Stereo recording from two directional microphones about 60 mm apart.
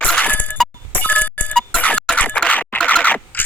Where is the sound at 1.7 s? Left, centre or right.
Left.